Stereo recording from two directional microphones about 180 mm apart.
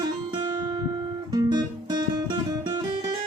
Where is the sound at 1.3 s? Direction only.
20° right (ahead or behind).